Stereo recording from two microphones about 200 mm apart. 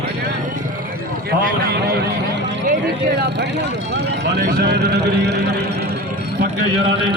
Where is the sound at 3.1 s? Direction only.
60° right (ahead or behind).